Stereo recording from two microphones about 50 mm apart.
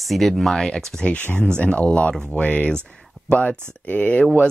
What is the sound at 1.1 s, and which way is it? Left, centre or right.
Speech, left.